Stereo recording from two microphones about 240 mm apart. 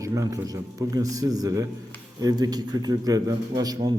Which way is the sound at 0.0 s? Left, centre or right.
Centre.